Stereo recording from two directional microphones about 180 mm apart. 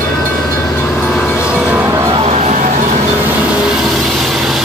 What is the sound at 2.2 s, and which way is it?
Music, 35° right (ahead or behind).